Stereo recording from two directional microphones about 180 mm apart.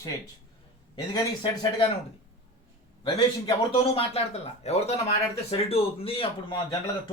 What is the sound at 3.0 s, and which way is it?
A man's voice, 25° left (ahead or behind).